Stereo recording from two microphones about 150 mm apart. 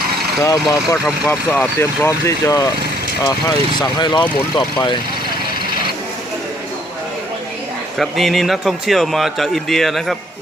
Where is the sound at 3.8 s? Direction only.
30° left (ahead or behind).